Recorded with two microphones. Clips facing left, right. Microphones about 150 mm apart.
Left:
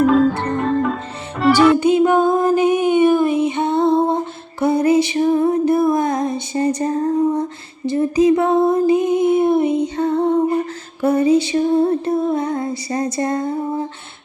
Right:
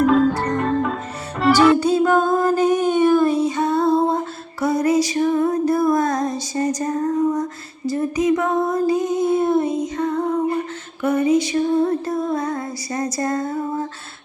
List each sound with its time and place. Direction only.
0.0 s music: centre (ahead or behind)
1.8 s music: 15° left (ahead or behind)
2.7 s a sound: 15° left (ahead or behind)
3.5 s music: 25° left (ahead or behind)
9.7 s music: 30° left (ahead or behind)